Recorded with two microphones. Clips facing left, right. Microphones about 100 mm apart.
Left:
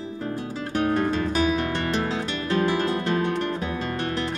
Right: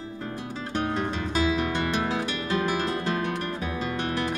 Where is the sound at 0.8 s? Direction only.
10° right (ahead or behind).